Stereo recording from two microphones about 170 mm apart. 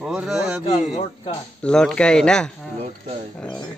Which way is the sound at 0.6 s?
30° left (ahead or behind).